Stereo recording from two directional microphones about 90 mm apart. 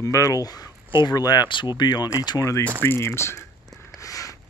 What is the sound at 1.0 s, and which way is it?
Speech, 50° left (ahead or behind).